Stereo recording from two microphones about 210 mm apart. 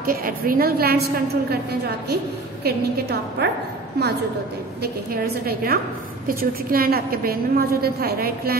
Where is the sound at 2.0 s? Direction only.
50° right (ahead or behind).